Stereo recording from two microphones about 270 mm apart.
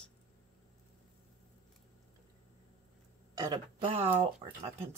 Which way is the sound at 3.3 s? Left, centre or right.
Centre.